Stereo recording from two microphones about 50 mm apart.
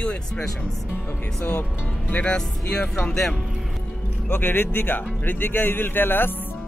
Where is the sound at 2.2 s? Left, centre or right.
Centre.